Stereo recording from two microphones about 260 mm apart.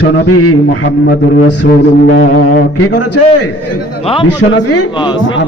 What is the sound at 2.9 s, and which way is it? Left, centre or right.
Speech, left.